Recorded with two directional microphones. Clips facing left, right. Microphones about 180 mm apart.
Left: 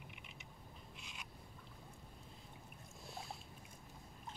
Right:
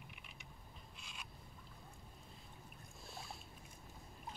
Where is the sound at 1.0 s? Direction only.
20° left (ahead or behind).